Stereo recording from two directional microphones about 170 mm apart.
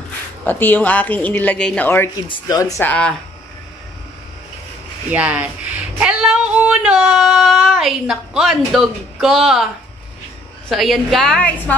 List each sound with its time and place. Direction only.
0.5 s speech: 10° left (ahead or behind)
2.2 s speech: 25° left (ahead or behind)
2.9 s a woman's voice: 5° left (ahead or behind)
5.1 s speech: 10° right (ahead or behind)
10.7 s a woman's voice: centre (ahead or behind)